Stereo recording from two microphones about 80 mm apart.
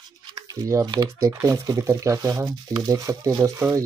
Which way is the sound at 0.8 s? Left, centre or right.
Right.